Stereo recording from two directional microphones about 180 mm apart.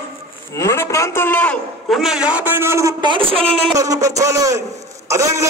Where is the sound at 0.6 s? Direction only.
15° left (ahead or behind); by 3.4 s 30° right (ahead or behind).